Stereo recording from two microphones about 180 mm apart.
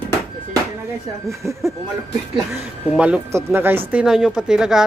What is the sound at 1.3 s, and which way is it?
Speech, 15° right (ahead or behind).